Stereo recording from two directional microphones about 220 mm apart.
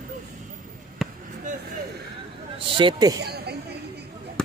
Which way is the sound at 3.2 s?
45° right (ahead or behind).